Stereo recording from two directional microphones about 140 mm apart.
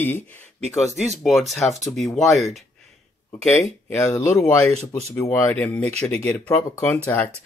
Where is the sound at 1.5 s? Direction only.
Centre (ahead or behind).